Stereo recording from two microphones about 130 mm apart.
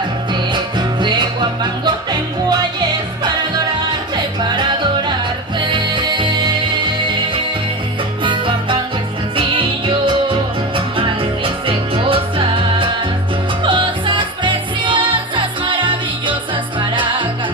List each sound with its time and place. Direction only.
4.4 s music: 35° right (ahead or behind)
8.2 s music: 40° right (ahead or behind)